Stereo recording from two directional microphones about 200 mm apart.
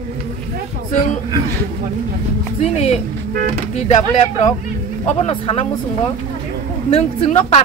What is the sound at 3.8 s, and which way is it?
Speech, 35° left (ahead or behind).